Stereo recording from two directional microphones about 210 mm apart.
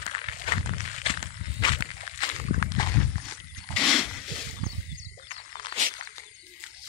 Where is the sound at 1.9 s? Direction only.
35° left (ahead or behind).